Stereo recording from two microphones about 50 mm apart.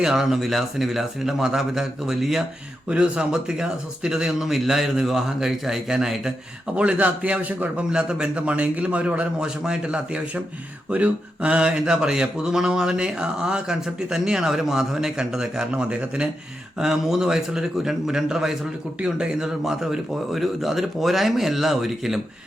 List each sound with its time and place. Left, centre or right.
0.0 s speech: centre
2.9 s speech: centre
6.7 s a man's voice: right
7.8 s a man's voice: centre